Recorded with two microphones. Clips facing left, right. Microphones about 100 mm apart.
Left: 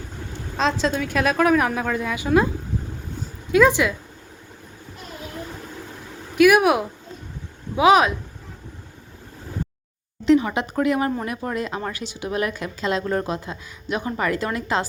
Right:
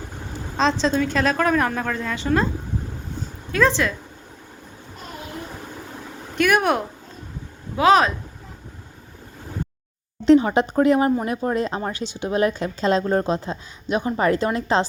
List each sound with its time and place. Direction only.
0.5 s a woman's voice: 5° left (ahead or behind)
3.5 s a woman's voice: 15° left (ahead or behind)
6.3 s a woman's voice: 5° left (ahead or behind)
10.2 s a woman's voice: 35° right (ahead or behind)